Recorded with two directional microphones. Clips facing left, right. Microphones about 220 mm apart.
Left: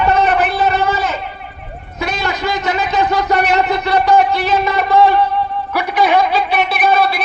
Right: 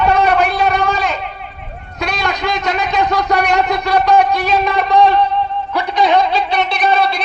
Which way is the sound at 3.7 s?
15° right (ahead or behind).